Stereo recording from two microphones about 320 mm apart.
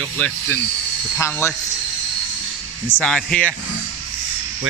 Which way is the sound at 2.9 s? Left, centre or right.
Centre.